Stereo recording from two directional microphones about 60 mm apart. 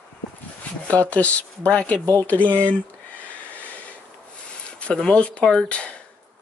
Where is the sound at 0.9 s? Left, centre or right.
Left.